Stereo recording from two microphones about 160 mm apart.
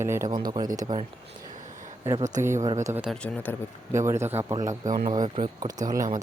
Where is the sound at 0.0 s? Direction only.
15° right (ahead or behind).